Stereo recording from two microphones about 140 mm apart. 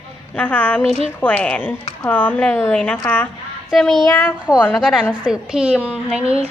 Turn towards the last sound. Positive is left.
turn(degrees=-10)  # may be behind; listen again after turning